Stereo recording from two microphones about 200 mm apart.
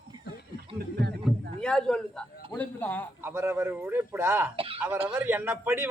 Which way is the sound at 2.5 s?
10° left (ahead or behind).